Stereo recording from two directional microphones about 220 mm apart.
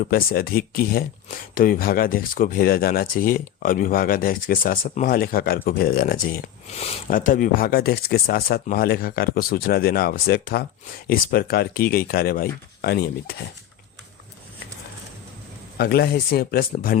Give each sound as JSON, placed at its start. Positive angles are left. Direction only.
{"t": 0.0, "sound": "speech", "side_deg": 40}
{"t": 15.8, "sound": "speech", "side_deg": 45}